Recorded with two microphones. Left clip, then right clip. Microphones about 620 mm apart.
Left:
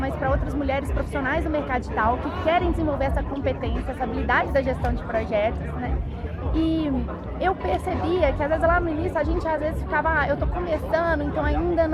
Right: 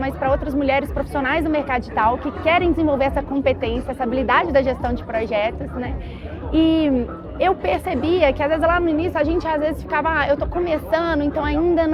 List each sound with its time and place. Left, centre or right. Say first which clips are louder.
0.0 s a woman's voice: right 5 dB; right